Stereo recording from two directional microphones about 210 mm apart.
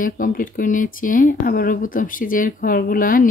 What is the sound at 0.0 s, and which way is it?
A woman's voice, 40° left (ahead or behind).